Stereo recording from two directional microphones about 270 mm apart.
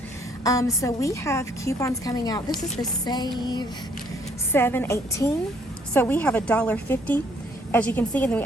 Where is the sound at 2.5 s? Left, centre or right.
Left.